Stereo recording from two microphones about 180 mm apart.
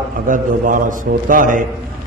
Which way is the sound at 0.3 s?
50° right (ahead or behind).